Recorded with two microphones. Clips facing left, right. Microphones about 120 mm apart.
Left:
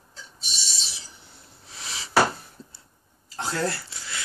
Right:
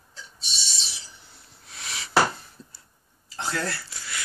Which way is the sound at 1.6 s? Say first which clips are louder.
Even; 30° left (ahead or behind).